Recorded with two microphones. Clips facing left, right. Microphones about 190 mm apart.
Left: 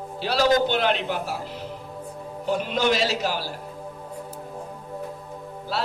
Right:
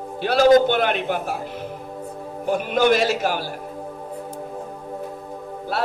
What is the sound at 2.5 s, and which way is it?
A man's voice, 55° right (ahead or behind).